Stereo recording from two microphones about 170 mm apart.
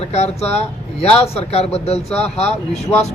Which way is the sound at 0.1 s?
40° left (ahead or behind).